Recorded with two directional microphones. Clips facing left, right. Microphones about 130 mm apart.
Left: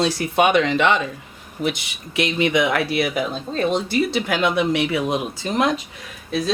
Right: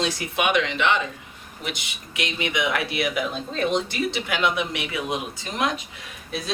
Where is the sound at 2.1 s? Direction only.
35° left (ahead or behind).